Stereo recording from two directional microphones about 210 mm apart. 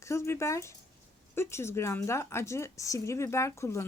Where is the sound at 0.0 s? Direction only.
15° left (ahead or behind).